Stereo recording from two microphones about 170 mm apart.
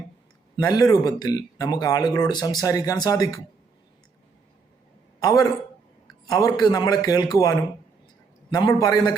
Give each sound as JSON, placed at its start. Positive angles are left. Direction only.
{"t": 0.5, "sound": "speech", "side_deg": 25}
{"t": 5.2, "sound": "a man's voice", "side_deg": 20}